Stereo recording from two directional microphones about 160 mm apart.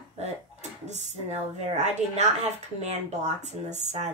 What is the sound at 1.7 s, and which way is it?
Speech, 45° right (ahead or behind).